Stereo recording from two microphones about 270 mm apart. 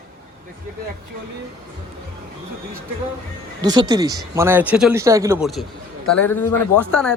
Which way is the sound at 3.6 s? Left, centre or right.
Centre.